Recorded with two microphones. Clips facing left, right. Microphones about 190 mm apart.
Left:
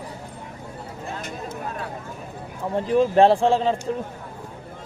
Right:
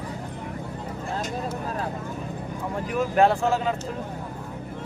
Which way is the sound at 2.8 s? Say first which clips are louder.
Left 5 dB; 30° left (ahead or behind).